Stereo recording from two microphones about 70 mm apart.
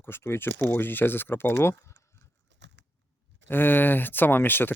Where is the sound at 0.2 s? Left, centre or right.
Left.